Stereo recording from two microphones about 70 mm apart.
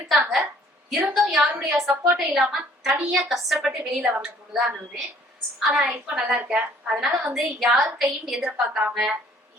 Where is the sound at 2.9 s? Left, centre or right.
Centre.